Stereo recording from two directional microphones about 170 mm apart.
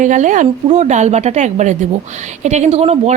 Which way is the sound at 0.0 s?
50° right (ahead or behind).